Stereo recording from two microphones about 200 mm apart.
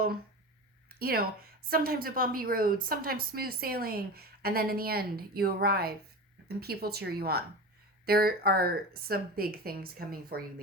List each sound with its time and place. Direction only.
0.9 s a woman's voice: 50° right (ahead or behind)